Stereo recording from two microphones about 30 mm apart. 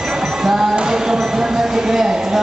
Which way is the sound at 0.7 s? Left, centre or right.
Right.